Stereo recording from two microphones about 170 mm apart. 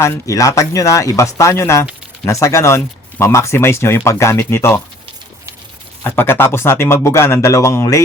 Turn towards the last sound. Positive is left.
turn(degrees=20)  # may be behind; listen again after turning